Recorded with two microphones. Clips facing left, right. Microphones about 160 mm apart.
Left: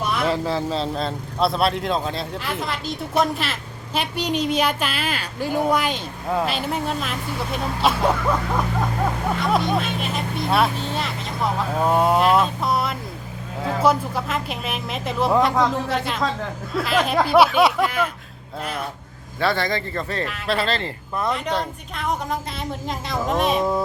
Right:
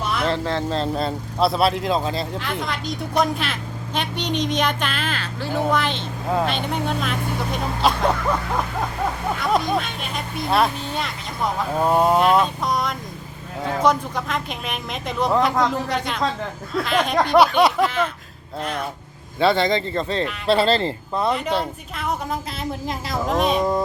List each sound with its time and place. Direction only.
0.3 s speech: 5° left (ahead or behind)
9.4 s speech: centre (ahead or behind)
19.4 s speech: 20° right (ahead or behind)
21.2 s speech: 5° right (ahead or behind)